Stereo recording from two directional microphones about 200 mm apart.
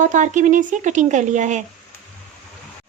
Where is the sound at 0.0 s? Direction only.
40° right (ahead or behind).